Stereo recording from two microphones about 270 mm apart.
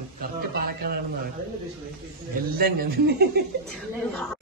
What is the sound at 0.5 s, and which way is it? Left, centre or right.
Speech, right.